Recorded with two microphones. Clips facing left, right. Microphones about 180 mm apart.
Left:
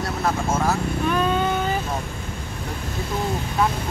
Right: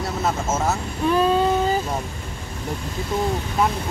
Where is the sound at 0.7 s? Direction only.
30° right (ahead or behind).